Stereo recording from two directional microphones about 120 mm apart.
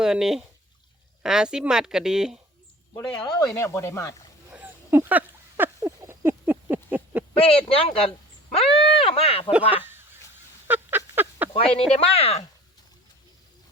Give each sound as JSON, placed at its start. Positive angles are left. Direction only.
{"t": 0.0, "sound": "speech", "side_deg": -5}
{"t": 3.2, "sound": "speech", "side_deg": 30}
{"t": 4.5, "sound": "a sound", "side_deg": -15}
{"t": 7.4, "sound": "speech", "side_deg": 55}
{"t": 9.5, "sound": "speech", "side_deg": -15}
{"t": 10.7, "sound": "a sound", "side_deg": -15}
{"t": 11.5, "sound": "speech", "side_deg": 55}